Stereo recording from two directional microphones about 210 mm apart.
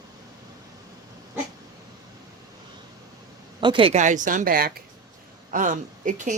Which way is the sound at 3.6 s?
25° right (ahead or behind).